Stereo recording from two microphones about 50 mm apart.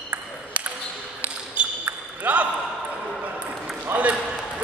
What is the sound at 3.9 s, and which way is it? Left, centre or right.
Ping, right.